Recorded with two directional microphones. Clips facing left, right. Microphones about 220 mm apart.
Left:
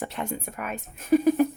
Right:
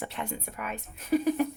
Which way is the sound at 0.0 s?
45° left (ahead or behind).